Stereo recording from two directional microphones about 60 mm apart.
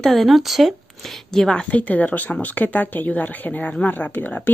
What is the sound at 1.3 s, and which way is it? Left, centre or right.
Speech, centre.